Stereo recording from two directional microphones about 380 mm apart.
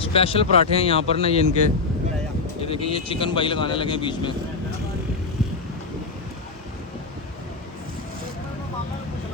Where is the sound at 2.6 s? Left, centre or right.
Centre.